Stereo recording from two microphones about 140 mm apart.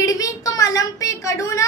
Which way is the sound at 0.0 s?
25° left (ahead or behind).